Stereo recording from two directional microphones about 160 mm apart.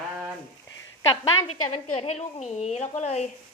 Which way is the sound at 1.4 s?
45° left (ahead or behind).